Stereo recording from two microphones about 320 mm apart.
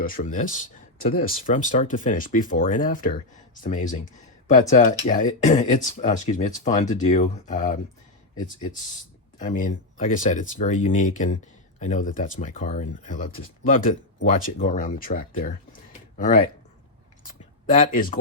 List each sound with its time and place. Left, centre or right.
0.0 s speech: left
9.4 s speech: left
17.2 s a sound: left